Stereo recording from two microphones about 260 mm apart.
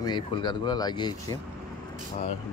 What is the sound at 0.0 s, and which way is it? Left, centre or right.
Speech, centre.